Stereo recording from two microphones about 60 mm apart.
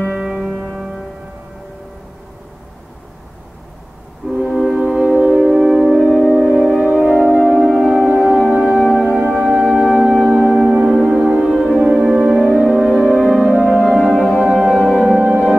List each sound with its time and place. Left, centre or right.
0.1 s music: centre
0.4 s music: centre
4.3 s music: centre
6.8 s music: right
7.4 s music: centre
8.4 s music: centre